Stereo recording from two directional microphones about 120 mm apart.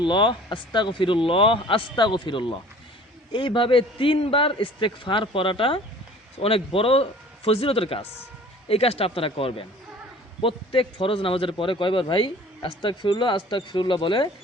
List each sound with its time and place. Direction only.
0.0 s a man's voice: 40° left (ahead or behind)